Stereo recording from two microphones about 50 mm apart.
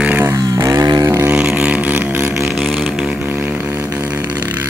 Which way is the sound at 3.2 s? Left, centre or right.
Right.